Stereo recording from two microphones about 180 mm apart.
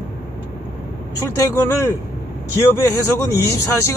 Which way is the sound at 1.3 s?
15° left (ahead or behind).